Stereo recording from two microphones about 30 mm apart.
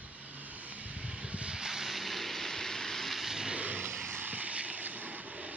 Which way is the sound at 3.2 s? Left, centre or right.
Right.